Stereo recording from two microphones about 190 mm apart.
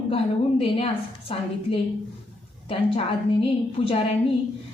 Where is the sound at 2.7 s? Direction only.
30° left (ahead or behind).